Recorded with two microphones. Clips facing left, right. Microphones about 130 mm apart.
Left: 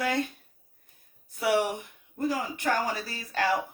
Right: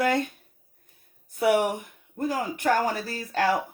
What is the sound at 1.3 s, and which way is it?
Speech, 50° right (ahead or behind).